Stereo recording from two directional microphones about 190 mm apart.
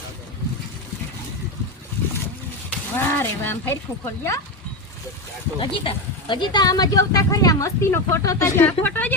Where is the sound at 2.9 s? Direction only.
10° left (ahead or behind).